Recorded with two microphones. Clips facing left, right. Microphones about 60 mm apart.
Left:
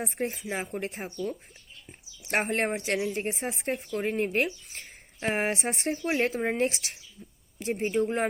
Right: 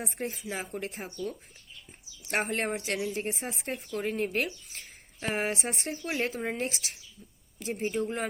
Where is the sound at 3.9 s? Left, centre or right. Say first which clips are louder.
Left 2 dB; left.